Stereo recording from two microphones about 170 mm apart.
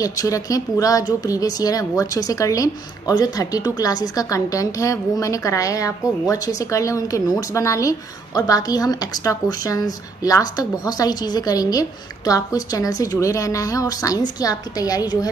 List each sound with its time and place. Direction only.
0.0 s speech: 20° left (ahead or behind)